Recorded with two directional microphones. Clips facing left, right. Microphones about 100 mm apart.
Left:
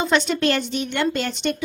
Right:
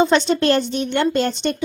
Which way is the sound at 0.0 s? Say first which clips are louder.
Right 4 dB; 30° right (ahead or behind).